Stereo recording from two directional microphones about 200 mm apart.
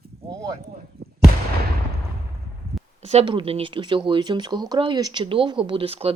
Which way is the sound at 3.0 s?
30° right (ahead or behind).